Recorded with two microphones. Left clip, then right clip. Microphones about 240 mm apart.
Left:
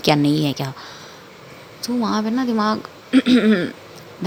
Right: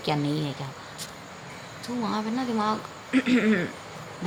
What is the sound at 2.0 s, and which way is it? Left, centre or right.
Speech, left.